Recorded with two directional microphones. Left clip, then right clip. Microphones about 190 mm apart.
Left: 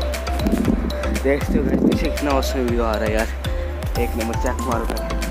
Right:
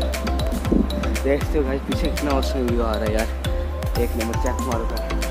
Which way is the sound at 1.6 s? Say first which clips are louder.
Even; 50° left (ahead or behind).